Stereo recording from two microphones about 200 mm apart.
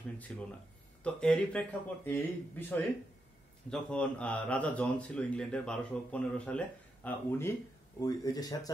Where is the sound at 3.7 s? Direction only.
5° left (ahead or behind).